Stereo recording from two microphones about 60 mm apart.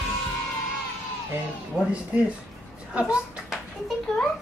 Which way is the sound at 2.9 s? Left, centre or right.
Centre.